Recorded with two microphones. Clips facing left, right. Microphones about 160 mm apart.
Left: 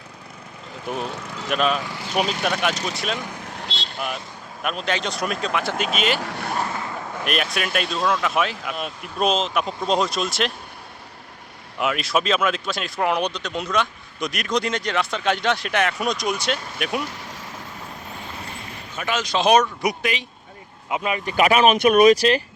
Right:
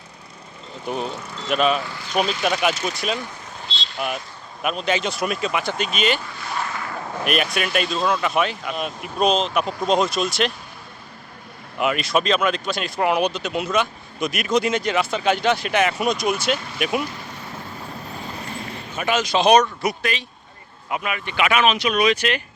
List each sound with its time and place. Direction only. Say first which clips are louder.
1.5 s speech: right 2 dB; centre (ahead or behind)
3.5 s vehicle: left 2 dB; 70° left (ahead or behind)
4.6 s speech: right 3 dB; centre (ahead or behind)
6.1 s speech: left 5 dB; 75° left (ahead or behind)
6.7 s a sound: left 1 dB; 25° left (ahead or behind)
7.3 s speech: right 2 dB; centre (ahead or behind)
11.8 s speech: right 2 dB; centre (ahead or behind)
18.9 s speech: right 3 dB; 10° right (ahead or behind)
19.8 s speech: even; 15° left (ahead or behind)
21.2 s speech: left 3 dB; 40° left (ahead or behind)
21.8 s speech: left 6 dB; 50° left (ahead or behind)